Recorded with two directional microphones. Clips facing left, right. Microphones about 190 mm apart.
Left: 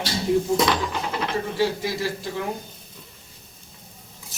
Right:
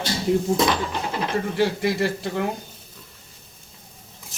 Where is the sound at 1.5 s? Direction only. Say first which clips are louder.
Right 3 dB; 60° right (ahead or behind).